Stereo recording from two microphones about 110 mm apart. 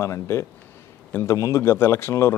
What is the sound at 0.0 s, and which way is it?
A man's voice, 25° left (ahead or behind).